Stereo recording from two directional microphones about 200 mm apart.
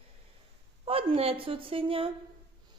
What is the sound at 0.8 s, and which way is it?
A woman's voice, 30° right (ahead or behind).